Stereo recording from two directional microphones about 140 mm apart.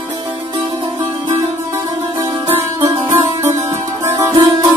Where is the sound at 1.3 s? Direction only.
25° right (ahead or behind).